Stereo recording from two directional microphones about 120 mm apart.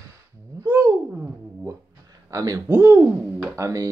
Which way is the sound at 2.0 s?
30° right (ahead or behind).